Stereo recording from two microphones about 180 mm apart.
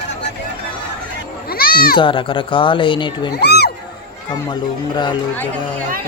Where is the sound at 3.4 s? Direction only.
65° left (ahead or behind).